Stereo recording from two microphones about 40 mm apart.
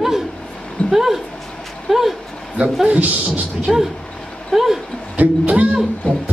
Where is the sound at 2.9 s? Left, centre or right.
Right.